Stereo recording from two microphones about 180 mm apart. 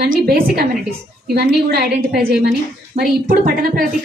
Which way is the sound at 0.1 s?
55° right (ahead or behind).